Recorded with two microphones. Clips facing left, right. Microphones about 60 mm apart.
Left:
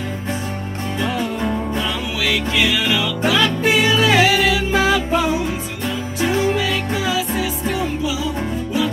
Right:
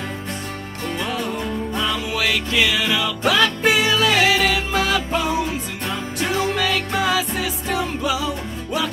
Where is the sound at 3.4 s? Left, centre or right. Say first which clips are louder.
Left 1 dB; left.